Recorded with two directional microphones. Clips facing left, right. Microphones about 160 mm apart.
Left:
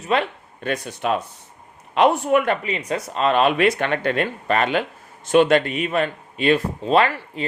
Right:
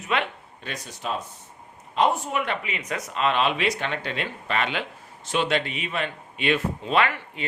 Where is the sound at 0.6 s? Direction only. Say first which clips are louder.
Left 9 dB; 55° left (ahead or behind).